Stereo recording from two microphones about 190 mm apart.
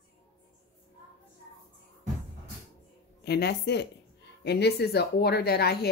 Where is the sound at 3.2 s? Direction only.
60° left (ahead or behind).